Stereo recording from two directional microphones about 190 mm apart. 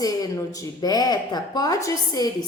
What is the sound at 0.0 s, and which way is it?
Speech, 20° left (ahead or behind).